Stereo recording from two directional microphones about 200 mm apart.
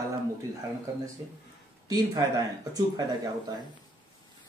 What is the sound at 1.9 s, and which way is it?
Speech, 20° right (ahead or behind).